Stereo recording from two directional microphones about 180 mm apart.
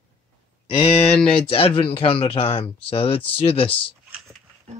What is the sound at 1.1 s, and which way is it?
Speech, 5° left (ahead or behind).